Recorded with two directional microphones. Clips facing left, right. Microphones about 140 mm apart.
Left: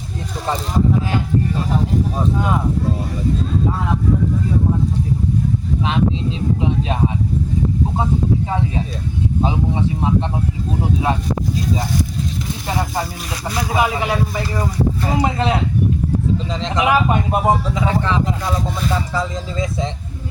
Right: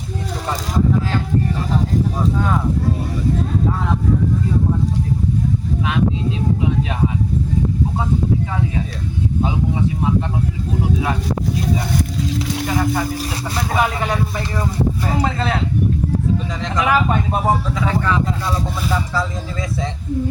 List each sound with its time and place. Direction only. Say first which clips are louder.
12.6 s a sound: right 2 dB; 25° left (ahead or behind)
13.6 s speech: left 1 dB; 5° left (ahead or behind)
16.6 s speech: left 1 dB; 20° left (ahead or behind)